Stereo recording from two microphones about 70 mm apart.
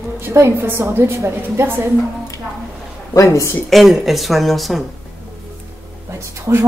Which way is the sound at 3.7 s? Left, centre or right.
Centre.